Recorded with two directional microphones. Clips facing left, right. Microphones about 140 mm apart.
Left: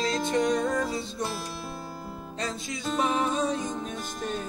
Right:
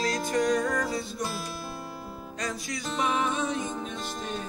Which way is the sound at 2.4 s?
25° left (ahead or behind).